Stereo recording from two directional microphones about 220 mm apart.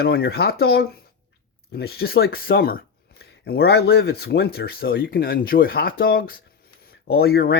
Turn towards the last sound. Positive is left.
turn(degrees=45)  # may be behind; listen again after turning